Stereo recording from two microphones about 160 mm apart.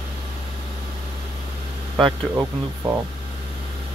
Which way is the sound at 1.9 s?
30° right (ahead or behind).